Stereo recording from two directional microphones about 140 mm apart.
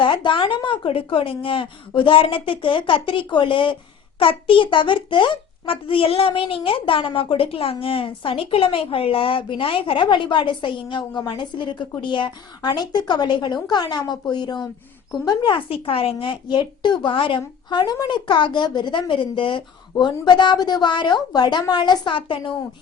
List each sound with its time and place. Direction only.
0.0 s a child's voice: 35° left (ahead or behind)